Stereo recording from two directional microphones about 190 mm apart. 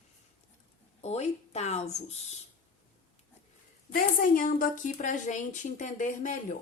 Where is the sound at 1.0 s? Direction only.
35° left (ahead or behind).